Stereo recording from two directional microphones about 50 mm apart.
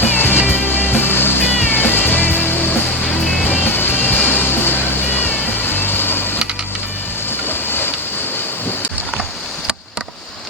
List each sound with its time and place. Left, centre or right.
0.0 s music: left
3.7 s music: left
7.4 s a sound: left